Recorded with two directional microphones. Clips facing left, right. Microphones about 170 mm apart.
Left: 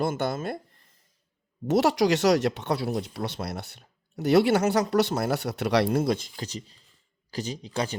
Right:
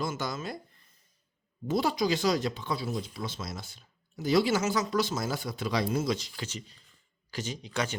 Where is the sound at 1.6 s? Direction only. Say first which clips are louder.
Left 6 dB; 75° left (ahead or behind).